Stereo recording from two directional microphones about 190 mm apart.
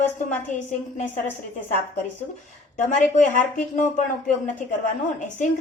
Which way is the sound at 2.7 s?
40° left (ahead or behind).